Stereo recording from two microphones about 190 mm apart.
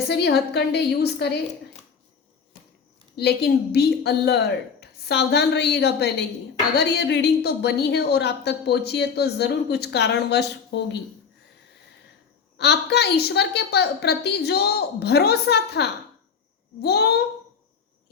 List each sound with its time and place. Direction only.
0.1 s a woman's voice: 60° left (ahead or behind)
3.2 s a woman's voice: 60° left (ahead or behind)
12.5 s a woman's voice: 60° left (ahead or behind)